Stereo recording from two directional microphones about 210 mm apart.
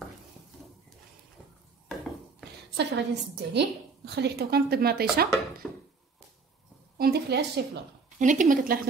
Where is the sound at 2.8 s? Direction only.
55° right (ahead or behind).